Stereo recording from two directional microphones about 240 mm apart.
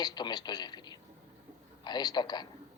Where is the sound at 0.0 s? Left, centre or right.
Centre.